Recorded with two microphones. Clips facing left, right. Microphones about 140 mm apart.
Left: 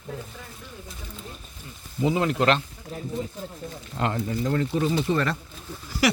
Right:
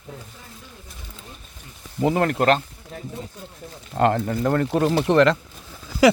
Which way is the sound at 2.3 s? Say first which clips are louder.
Right 3 dB; 45° right (ahead or behind).